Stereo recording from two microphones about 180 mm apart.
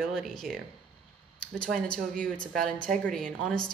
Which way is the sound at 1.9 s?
5° left (ahead or behind).